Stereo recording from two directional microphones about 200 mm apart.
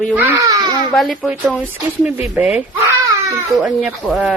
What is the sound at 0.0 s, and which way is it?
Speech, 10° right (ahead or behind).